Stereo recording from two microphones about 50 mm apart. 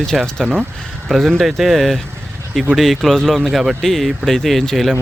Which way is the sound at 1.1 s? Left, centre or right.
Centre.